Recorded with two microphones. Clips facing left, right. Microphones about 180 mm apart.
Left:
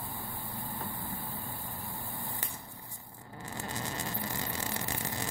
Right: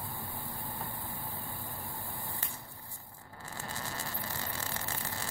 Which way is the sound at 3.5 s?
20° left (ahead or behind).